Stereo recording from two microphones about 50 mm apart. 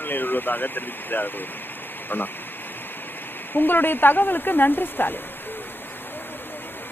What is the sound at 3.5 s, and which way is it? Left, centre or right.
Speech, left.